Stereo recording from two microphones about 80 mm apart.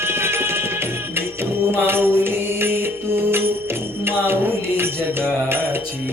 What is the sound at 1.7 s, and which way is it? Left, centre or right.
Mantra, right.